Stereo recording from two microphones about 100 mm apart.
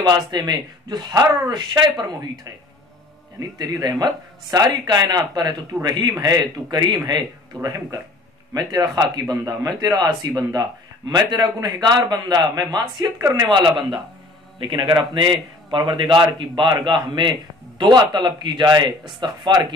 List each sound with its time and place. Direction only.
0.0 s a man's voice: 45° right (ahead or behind)
3.3 s a man's voice: 40° right (ahead or behind)
13.2 s speech: 30° right (ahead or behind)
13.5 s a man's voice: 55° right (ahead or behind)